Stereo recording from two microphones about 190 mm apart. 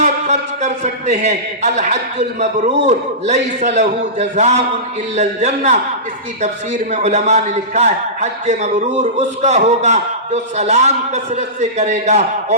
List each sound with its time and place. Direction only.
0.0 s a sound: 35° right (ahead or behind)
1.2 s a man's voice: 35° right (ahead or behind)
6.9 s a man's voice: 35° right (ahead or behind)